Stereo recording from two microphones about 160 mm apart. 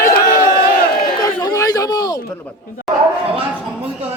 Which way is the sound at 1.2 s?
25° left (ahead or behind).